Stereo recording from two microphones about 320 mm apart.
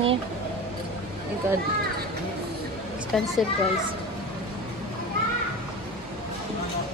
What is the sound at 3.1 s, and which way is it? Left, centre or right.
Speech, centre.